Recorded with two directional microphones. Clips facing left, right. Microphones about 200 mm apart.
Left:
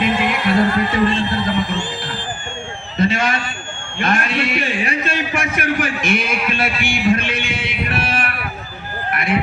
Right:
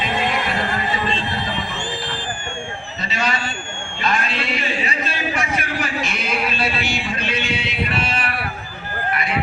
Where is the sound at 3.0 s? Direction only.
50° left (ahead or behind).